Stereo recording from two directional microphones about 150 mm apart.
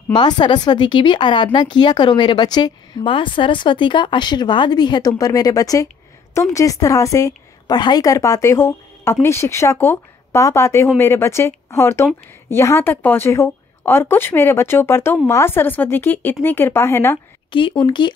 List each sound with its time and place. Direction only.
0.1 s speech: 30° left (ahead or behind)
17.5 s speech: 35° left (ahead or behind)